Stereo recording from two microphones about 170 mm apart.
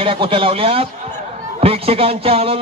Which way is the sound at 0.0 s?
30° right (ahead or behind).